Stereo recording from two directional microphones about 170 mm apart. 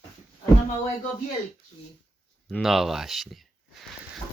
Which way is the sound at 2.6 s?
Centre (ahead or behind).